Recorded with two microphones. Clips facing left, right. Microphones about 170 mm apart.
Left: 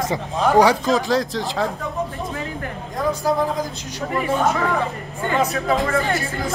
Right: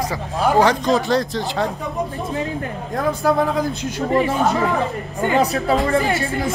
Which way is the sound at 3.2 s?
60° right (ahead or behind).